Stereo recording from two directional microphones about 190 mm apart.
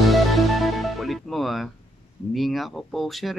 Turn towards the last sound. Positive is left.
turn(degrees=0)  # may be behind; listen again after turning